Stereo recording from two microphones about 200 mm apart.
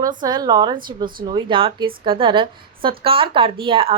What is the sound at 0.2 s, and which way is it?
A woman's voice, 20° right (ahead or behind).